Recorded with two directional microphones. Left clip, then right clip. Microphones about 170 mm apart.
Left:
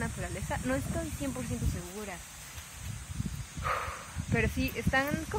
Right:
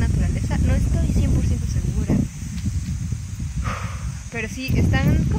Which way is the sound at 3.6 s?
15° right (ahead or behind).